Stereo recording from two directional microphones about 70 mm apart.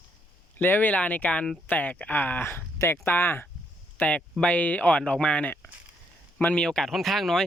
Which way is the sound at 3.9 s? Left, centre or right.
Centre.